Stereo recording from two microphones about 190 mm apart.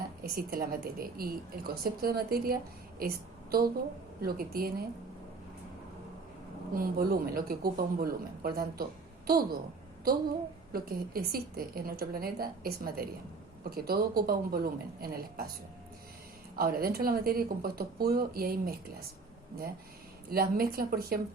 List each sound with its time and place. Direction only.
0.2 s a woman's voice: 50° right (ahead or behind)
6.7 s speech: 50° right (ahead or behind)
10.7 s speech: 50° right (ahead or behind)
16.6 s speech: 50° right (ahead or behind)
20.3 s speech: 50° right (ahead or behind)